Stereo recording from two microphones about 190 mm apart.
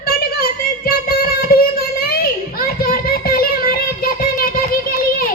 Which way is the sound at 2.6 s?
50° left (ahead or behind).